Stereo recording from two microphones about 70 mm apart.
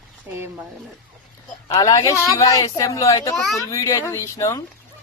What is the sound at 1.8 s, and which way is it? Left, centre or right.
Speech, left.